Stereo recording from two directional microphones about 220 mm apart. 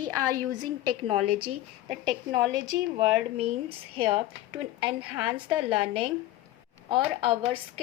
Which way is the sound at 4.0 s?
25° right (ahead or behind).